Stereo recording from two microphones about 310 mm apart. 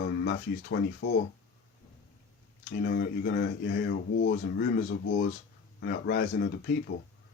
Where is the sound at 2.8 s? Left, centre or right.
Left.